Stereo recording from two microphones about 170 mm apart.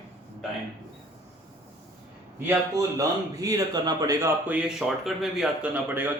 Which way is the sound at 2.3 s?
10° right (ahead or behind).